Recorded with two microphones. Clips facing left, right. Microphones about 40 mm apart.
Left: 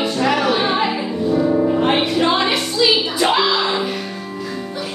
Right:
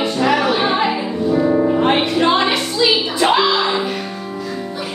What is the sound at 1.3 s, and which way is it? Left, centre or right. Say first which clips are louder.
Music: right 1 dB; right.